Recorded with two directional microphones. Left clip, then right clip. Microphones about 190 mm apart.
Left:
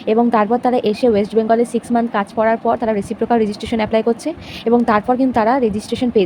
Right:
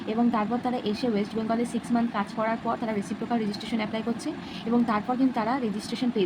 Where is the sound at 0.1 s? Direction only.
50° left (ahead or behind).